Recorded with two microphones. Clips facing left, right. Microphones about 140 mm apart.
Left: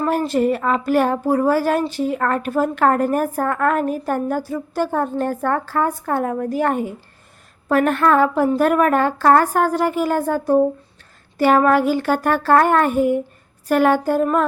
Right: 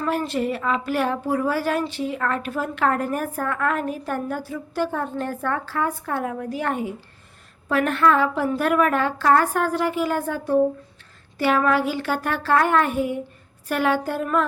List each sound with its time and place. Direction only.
0.0 s a woman's voice: 40° left (ahead or behind)